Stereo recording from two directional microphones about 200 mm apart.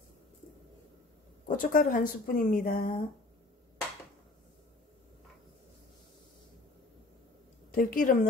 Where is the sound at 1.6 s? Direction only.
45° left (ahead or behind).